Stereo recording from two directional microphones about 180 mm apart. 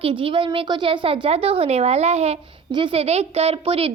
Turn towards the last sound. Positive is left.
turn(degrees=-30)  # may be behind; listen again after turning